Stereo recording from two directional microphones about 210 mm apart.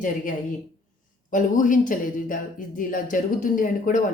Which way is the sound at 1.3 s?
40° left (ahead or behind).